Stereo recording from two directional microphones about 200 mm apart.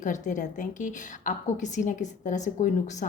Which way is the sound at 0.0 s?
40° left (ahead or behind).